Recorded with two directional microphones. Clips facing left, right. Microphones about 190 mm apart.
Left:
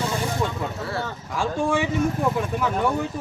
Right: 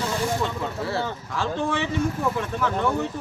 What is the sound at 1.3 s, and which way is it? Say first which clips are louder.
Speech: left 3 dB; 10° left (ahead or behind).